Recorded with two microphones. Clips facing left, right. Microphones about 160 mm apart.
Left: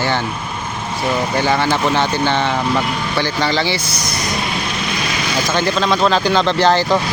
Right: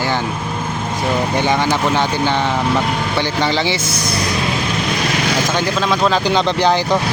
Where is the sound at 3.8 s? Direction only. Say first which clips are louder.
Right 3 dB; 55° right (ahead or behind).